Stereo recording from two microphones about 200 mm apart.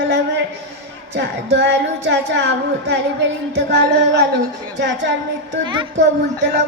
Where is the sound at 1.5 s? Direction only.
60° right (ahead or behind).